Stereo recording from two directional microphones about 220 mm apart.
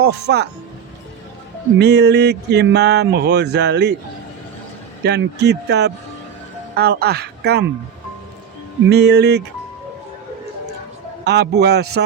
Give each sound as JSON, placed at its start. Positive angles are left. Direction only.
{"t": 0.0, "sound": "speech", "side_deg": -45}
{"t": 1.8, "sound": "speech", "side_deg": -50}
{"t": 5.0, "sound": "speech", "side_deg": -50}
{"t": 8.9, "sound": "speech", "side_deg": -50}
{"t": 11.2, "sound": "speech", "side_deg": -50}